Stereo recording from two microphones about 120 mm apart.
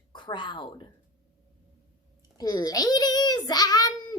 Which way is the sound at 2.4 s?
35° left (ahead or behind).